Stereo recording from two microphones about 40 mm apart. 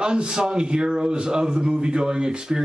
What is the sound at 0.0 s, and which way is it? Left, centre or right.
Speech, right.